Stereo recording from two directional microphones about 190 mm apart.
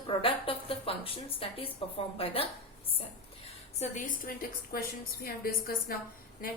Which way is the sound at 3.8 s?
45° left (ahead or behind).